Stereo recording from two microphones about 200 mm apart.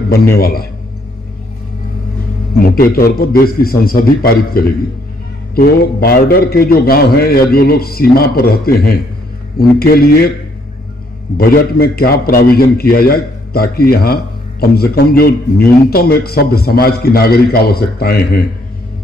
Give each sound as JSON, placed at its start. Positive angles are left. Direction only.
{"t": 0.4, "sound": "a man's voice", "side_deg": 50}
{"t": 2.6, "sound": "a man's voice", "side_deg": 50}
{"t": 11.3, "sound": "a man's voice", "side_deg": 50}